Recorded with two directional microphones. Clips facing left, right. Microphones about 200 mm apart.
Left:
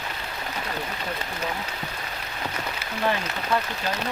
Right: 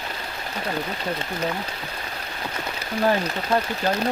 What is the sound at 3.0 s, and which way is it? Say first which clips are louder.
Speech: right 5 dB; 40° right (ahead or behind).